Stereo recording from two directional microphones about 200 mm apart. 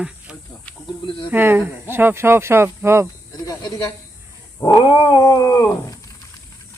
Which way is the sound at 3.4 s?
15° left (ahead or behind).